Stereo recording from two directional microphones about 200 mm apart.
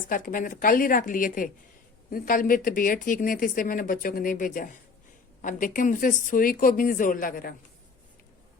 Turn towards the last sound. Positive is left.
turn(degrees=45)  # may be behind; listen again after turning